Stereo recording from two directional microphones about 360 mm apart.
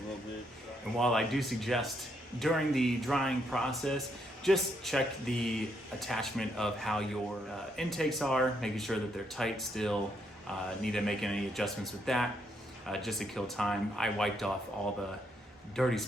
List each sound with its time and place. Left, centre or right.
0.9 s speech: centre
15.7 s speech: centre